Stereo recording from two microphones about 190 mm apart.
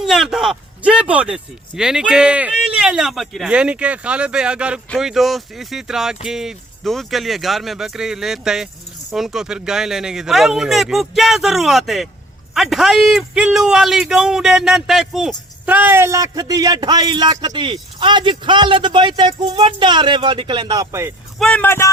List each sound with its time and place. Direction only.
0.0 s a man's voice: centre (ahead or behind); by 21.1 s 20° right (ahead or behind)
21.3 s a man's voice: 5° left (ahead or behind)